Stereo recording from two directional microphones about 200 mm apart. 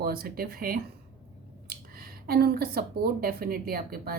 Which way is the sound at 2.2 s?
50° right (ahead or behind).